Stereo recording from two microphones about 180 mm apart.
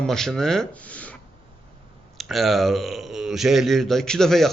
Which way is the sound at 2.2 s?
Centre (ahead or behind).